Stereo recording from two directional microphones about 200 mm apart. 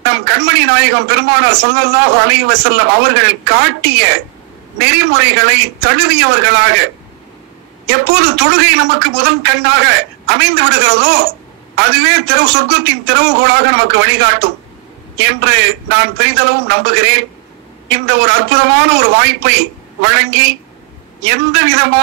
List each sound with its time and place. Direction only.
0.0 s a man's voice: 60° right (ahead or behind)
7.9 s a man's voice: 60° right (ahead or behind)